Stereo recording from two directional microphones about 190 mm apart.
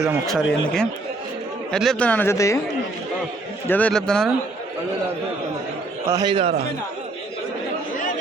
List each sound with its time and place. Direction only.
0.3 s speech: centre (ahead or behind)
3.7 s speech: 5° left (ahead or behind)
6.1 s a man's voice: 15° right (ahead or behind)
6.3 s a man's voice: 30° right (ahead or behind)